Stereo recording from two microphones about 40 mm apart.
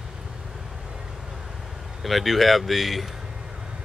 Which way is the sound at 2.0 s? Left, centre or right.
Centre.